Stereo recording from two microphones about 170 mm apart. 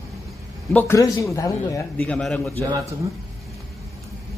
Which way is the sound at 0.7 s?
15° left (ahead or behind).